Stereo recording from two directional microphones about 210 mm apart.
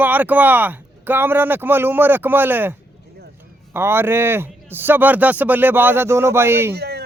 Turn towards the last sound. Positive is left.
turn(degrees=-50)  # may be behind; listen again after turning